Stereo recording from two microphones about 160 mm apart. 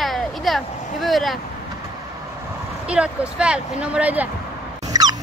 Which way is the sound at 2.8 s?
5° right (ahead or behind).